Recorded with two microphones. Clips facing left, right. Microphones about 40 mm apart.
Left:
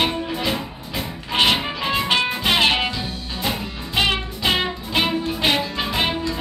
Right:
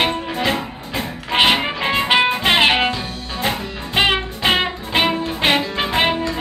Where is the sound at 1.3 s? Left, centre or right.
Right.